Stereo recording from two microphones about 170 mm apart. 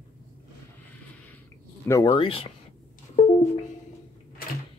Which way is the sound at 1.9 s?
20° left (ahead or behind).